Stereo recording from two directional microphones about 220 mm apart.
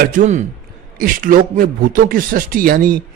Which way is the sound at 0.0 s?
35° right (ahead or behind).